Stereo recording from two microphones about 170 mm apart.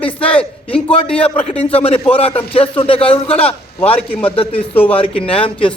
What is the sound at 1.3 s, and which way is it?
A man's voice, 35° left (ahead or behind).